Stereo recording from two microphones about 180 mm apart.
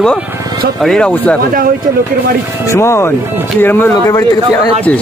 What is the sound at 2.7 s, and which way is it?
Speech, 15° left (ahead or behind).